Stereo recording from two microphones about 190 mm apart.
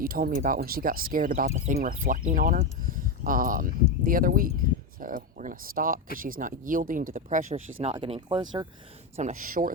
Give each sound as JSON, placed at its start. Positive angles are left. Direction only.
{"t": 0.0, "sound": "speech", "side_deg": -50}
{"t": 7.8, "sound": "speech", "side_deg": -30}
{"t": 9.1, "sound": "speech", "side_deg": -40}